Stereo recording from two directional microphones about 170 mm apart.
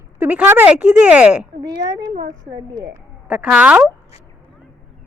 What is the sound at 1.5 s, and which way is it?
Speech, 20° right (ahead or behind).